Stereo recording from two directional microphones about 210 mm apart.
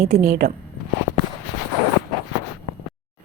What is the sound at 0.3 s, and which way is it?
Speech, 40° right (ahead or behind).